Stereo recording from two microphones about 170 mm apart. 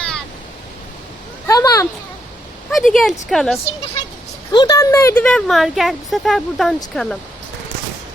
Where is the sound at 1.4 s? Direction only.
20° left (ahead or behind).